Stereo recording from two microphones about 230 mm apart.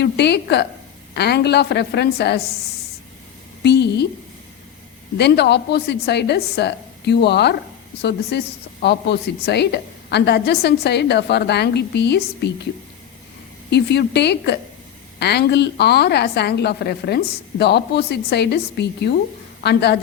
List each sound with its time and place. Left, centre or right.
0.0 s a woman's voice: left
3.6 s a woman's voice: left
5.1 s a woman's voice: left
13.7 s a woman's voice: left